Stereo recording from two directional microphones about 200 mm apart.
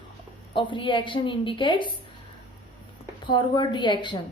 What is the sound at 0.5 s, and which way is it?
A woman's voice, 25° left (ahead or behind).